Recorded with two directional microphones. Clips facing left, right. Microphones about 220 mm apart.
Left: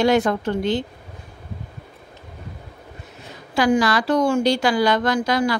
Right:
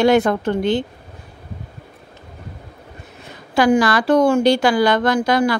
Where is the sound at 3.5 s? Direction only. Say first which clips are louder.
Right 3 dB; 55° right (ahead or behind).